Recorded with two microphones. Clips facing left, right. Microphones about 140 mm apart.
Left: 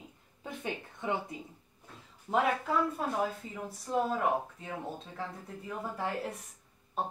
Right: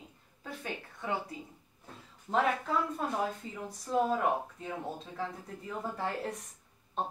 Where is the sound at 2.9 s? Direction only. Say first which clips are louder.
Left 1 dB; centre (ahead or behind).